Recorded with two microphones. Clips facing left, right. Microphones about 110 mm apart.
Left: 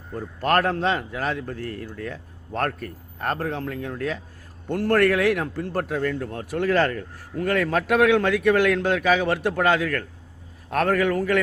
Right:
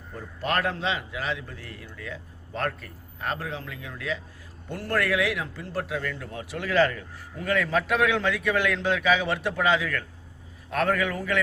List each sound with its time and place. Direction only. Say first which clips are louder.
0.2 s a man's voice: left 6 dB; 50° left (ahead or behind)